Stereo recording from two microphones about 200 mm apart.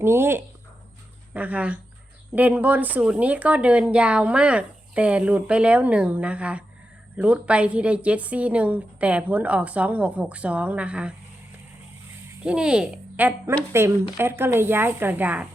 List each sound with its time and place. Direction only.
0.0 s speech: 10° right (ahead or behind)
12.4 s speech: 5° right (ahead or behind)